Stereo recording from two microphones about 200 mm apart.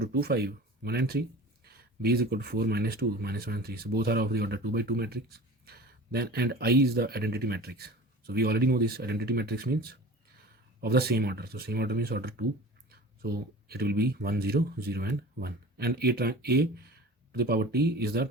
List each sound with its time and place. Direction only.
0.0 s speech: 50° right (ahead or behind)